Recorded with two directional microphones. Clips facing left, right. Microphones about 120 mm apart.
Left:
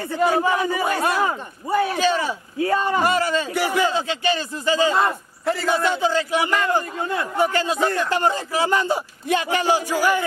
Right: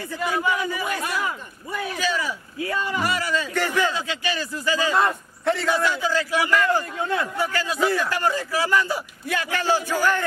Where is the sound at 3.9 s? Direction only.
30° left (ahead or behind).